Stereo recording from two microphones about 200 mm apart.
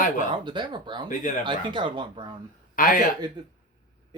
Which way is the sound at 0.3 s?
25° right (ahead or behind).